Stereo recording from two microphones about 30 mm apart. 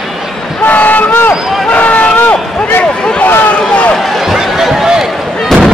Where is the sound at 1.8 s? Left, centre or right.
Left.